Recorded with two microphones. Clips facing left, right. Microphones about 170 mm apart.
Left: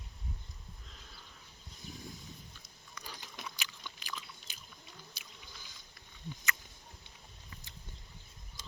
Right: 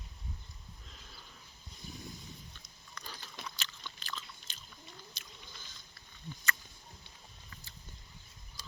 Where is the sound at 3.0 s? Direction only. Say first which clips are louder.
Even; 15° left (ahead or behind).